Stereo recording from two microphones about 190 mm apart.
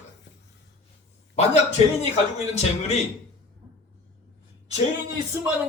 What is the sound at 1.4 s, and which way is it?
Speech, 35° left (ahead or behind).